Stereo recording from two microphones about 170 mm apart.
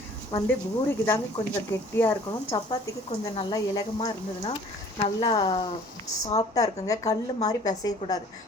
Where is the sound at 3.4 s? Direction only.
25° left (ahead or behind).